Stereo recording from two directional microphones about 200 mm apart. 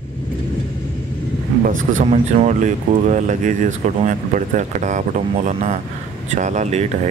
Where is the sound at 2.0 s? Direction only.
35° right (ahead or behind).